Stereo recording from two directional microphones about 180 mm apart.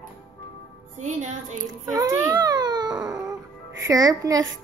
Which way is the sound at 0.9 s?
45° right (ahead or behind).